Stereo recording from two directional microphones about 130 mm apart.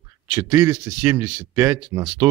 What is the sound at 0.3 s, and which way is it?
Speech, 30° right (ahead or behind).